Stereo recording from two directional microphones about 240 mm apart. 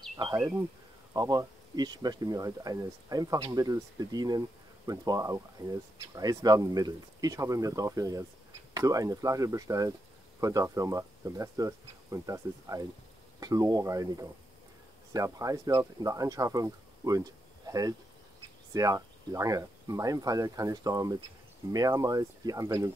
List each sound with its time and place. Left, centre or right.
0.2 s speech: centre